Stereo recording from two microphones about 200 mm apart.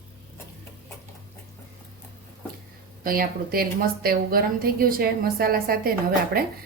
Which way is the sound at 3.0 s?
45° right (ahead or behind).